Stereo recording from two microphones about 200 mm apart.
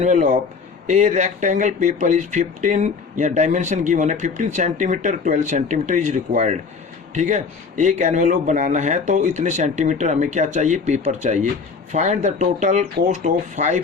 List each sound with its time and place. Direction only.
0.0 s speech: 40° right (ahead or behind)